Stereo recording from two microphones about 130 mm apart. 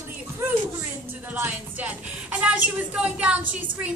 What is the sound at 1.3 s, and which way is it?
Speech, 15° right (ahead or behind).